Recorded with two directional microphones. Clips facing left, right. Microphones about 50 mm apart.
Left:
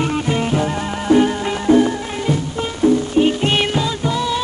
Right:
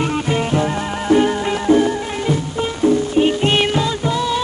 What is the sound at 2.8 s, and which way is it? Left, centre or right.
Music, right.